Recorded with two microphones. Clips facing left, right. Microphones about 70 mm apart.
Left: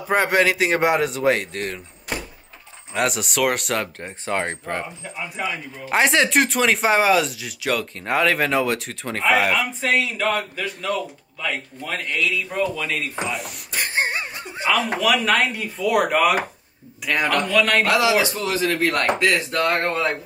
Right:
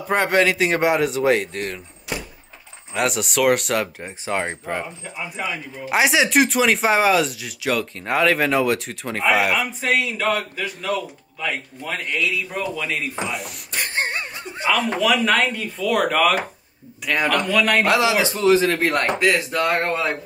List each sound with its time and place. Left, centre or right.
0.1 s speech: centre
2.9 s speech: centre
12.0 s speech: right
12.3 s speech: centre
17.0 s speech: centre
17.8 s speech: right
19.1 s speech: centre